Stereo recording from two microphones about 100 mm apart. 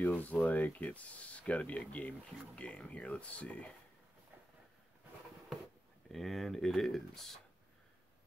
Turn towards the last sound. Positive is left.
turn(degrees=5)  # may be behind; listen again after turning